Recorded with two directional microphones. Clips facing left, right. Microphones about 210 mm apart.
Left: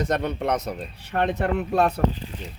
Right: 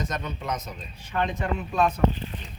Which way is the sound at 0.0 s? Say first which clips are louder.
Left 8 dB; 65° left (ahead or behind).